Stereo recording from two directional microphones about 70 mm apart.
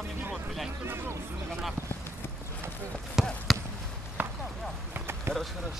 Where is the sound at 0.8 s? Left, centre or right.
Right.